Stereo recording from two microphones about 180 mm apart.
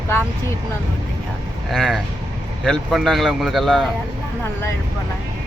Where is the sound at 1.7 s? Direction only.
Centre (ahead or behind).